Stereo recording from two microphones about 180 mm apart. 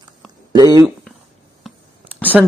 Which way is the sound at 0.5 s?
20° right (ahead or behind).